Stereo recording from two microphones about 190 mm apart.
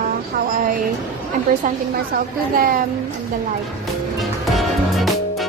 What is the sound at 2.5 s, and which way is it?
Speech, 45° right (ahead or behind).